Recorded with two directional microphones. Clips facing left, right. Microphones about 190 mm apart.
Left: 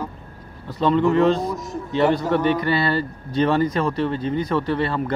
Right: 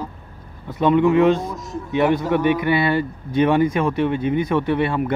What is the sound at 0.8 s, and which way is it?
A man's voice, 10° right (ahead or behind).